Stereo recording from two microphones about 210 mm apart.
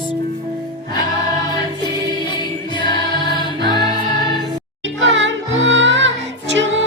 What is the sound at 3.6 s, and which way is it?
Music, 55° right (ahead or behind).